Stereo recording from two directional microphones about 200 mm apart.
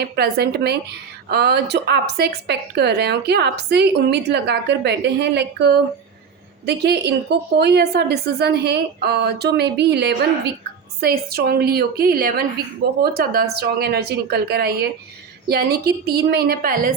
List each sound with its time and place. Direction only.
0.0 s a woman's voice: 55° right (ahead or behind)